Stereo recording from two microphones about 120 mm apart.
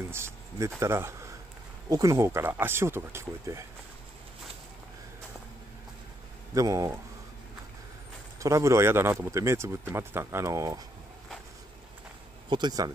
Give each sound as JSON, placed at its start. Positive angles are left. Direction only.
{"t": 0.1, "sound": "a sound", "side_deg": -20}
{"t": 0.7, "sound": "speech", "side_deg": -20}
{"t": 6.5, "sound": "speech", "side_deg": -30}
{"t": 8.4, "sound": "speech", "side_deg": -25}
{"t": 12.4, "sound": "speech", "side_deg": -40}